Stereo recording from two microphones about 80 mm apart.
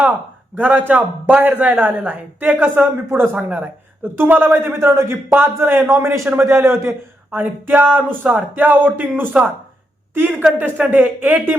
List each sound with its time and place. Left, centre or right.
0.5 s speech: centre
3.3 s speech: centre